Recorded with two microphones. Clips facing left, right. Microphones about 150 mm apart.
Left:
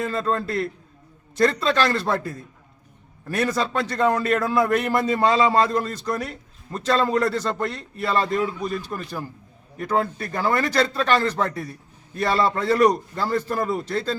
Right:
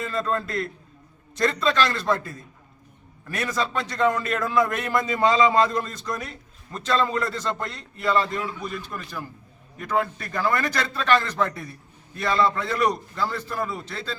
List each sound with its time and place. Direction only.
0.0 s a man's voice: 35° left (ahead or behind)
3.2 s a man's voice: 35° left (ahead or behind)